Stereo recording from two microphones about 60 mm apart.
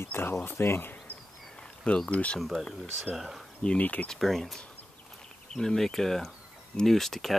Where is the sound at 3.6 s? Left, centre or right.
Left.